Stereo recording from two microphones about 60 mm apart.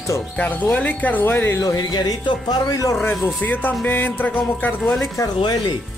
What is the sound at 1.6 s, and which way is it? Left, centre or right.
Speech, left.